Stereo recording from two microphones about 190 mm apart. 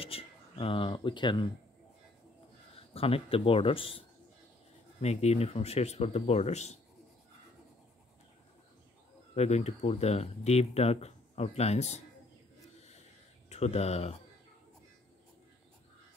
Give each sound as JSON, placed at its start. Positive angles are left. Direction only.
{"t": 0.0, "sound": "speech", "side_deg": 30}
{"t": 2.9, "sound": "speech", "side_deg": 30}
{"t": 5.0, "sound": "speech", "side_deg": 35}
{"t": 9.3, "sound": "speech", "side_deg": 35}
{"t": 13.5, "sound": "speech", "side_deg": 35}